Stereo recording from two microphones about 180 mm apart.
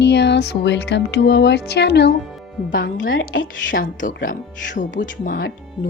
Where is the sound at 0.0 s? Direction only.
70° left (ahead or behind).